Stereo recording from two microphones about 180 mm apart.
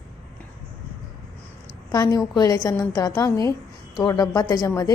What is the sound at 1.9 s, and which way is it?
A woman's voice, 20° left (ahead or behind).